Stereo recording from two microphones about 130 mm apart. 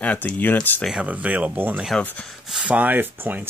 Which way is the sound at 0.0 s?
10° left (ahead or behind).